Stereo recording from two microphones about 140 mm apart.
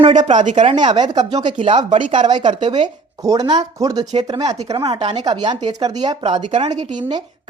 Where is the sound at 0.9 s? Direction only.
30° right (ahead or behind).